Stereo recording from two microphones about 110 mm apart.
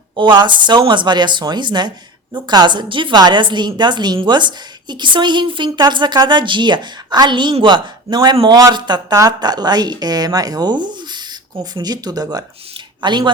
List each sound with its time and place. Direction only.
0.2 s a woman's voice: 45° right (ahead or behind)